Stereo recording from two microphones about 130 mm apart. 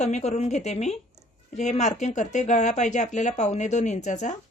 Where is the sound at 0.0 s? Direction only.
60° left (ahead or behind).